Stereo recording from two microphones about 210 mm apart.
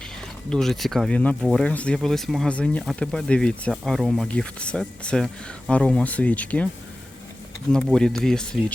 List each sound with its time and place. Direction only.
0.5 s speech: centre (ahead or behind)
7.7 s speech: centre (ahead or behind)